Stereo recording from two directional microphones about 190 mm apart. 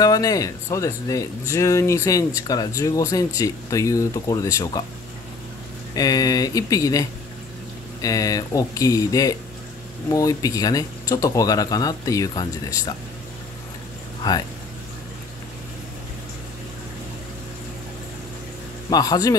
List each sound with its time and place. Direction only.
0.0 s speech: 20° left (ahead or behind)
5.9 s speech: 20° left (ahead or behind)
14.2 s speech: 20° left (ahead or behind)
18.9 s speech: 20° left (ahead or behind)